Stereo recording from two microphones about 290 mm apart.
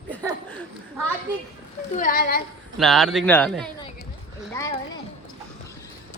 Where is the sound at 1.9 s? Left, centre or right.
Left.